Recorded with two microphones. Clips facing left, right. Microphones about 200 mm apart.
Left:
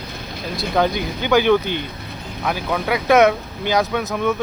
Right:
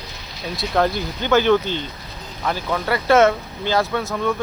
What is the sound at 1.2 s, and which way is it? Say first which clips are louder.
Speech: left 1 dB; 15° left (ahead or behind).